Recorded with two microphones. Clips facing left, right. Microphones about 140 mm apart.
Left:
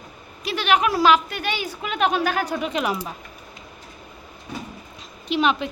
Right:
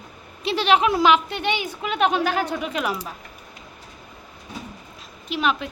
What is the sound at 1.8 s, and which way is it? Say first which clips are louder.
Speech: right 1 dB; centre (ahead or behind).